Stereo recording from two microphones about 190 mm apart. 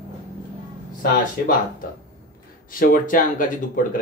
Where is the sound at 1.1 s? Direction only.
45° left (ahead or behind).